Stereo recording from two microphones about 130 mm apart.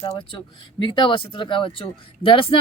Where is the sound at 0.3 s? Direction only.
40° left (ahead or behind).